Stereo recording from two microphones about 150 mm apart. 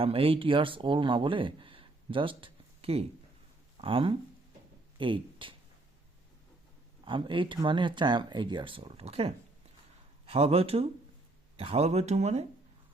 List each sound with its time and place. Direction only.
0.0 s speech: 40° right (ahead or behind)
7.0 s speech: 35° right (ahead or behind)